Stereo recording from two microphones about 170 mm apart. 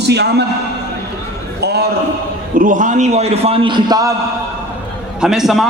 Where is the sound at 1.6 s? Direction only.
75° right (ahead or behind).